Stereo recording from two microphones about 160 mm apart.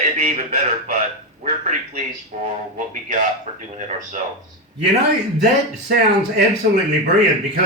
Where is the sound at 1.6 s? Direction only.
50° right (ahead or behind).